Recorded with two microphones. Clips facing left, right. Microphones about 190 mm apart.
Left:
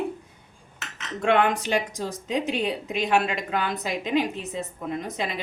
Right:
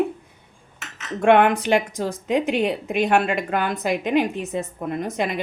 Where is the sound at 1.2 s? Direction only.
55° right (ahead or behind).